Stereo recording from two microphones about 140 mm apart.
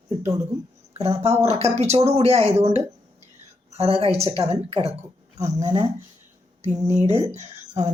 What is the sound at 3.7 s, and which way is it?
Speech, 45° right (ahead or behind).